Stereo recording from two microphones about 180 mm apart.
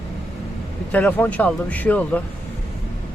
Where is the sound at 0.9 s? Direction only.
10° left (ahead or behind).